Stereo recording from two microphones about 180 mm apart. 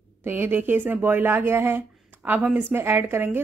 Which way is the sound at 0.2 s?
10° right (ahead or behind).